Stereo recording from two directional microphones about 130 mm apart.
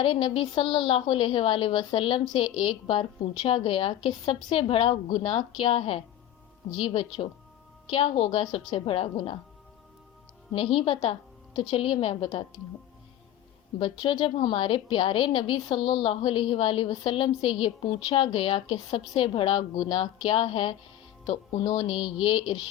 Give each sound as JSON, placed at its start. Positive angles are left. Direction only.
{"t": 0.0, "sound": "a woman's voice", "side_deg": 45}
{"t": 10.8, "sound": "a woman's voice", "side_deg": 40}
{"t": 13.7, "sound": "a woman's voice", "side_deg": 40}
{"t": 21.6, "sound": "a sound", "side_deg": 30}
{"t": 21.8, "sound": "speech", "side_deg": -5}